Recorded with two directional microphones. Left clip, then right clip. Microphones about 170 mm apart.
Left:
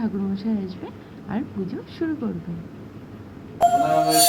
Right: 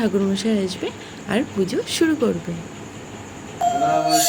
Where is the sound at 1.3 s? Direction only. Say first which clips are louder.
Right 9 dB; 20° right (ahead or behind).